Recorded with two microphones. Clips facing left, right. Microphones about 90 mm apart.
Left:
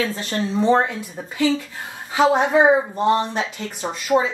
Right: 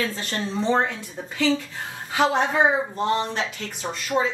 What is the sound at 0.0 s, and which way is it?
Speech, 10° left (ahead or behind).